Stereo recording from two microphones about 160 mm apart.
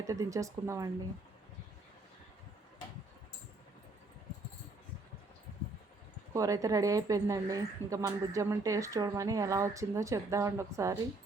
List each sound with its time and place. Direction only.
0.0 s a woman's voice: 20° right (ahead or behind)
6.3 s a woman's voice: 20° right (ahead or behind)